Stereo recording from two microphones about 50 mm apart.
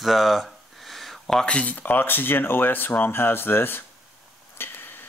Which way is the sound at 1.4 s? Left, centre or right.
Left.